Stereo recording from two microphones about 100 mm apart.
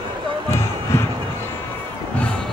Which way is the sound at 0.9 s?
25° left (ahead or behind).